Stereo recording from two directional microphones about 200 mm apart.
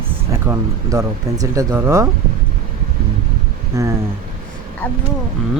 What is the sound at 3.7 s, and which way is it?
Speech, 15° right (ahead or behind).